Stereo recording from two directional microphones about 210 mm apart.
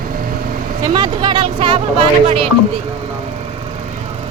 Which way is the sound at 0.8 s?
20° right (ahead or behind).